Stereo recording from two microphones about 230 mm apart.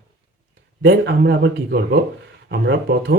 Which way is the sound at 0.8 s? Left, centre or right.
Right.